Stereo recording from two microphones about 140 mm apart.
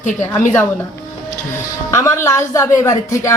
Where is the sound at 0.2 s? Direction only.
15° left (ahead or behind).